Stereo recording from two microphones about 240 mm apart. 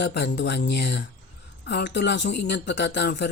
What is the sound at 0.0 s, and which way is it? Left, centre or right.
Speech, left.